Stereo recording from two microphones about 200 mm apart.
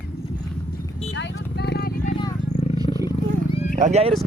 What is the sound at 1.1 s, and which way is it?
Horse, 60° left (ahead or behind).